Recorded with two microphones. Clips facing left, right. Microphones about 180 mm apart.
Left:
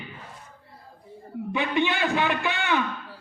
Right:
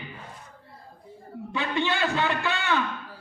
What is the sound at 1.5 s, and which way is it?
A man's voice, 15° left (ahead or behind).